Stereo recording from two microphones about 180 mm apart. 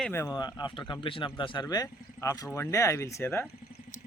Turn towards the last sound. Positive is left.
turn(degrees=15)  # may be behind; listen again after turning